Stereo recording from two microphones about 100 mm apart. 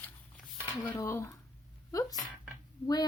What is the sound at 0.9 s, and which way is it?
Speech, 30° left (ahead or behind).